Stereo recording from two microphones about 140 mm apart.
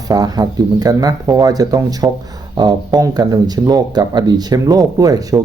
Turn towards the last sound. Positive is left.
turn(degrees=-25)  # may be behind; listen again after turning